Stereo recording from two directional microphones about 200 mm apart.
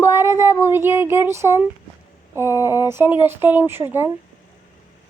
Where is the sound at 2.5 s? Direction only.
15° left (ahead or behind).